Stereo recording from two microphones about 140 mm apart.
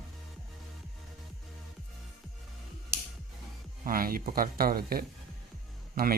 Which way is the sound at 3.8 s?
90° right.